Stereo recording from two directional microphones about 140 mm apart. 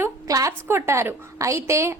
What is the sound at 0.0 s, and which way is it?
A woman's voice, 25° right (ahead or behind).